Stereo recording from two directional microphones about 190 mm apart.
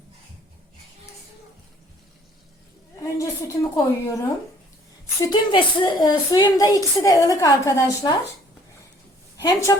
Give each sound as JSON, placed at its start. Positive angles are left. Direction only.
{"t": 3.0, "sound": "a woman's voice", "side_deg": 15}
{"t": 5.2, "sound": "speech", "side_deg": 25}
{"t": 9.4, "sound": "a woman's voice", "side_deg": 15}